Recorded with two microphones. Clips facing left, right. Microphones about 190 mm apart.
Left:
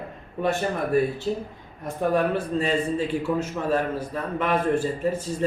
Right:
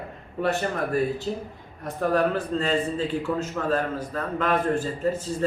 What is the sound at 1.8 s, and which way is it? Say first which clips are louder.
A man's voice: even; 10° left (ahead or behind).